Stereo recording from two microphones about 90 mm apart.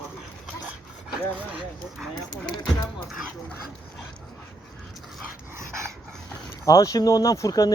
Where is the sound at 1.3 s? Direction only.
10° right (ahead or behind).